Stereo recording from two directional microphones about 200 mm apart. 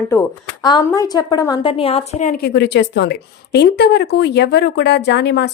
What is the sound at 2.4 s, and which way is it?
A woman's voice, 55° left (ahead or behind).